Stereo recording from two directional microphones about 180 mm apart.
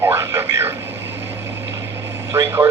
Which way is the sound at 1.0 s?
85° right.